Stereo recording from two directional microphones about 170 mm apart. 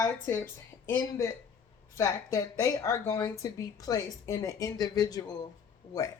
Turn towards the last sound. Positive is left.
turn(degrees=20)  # may be behind; listen again after turning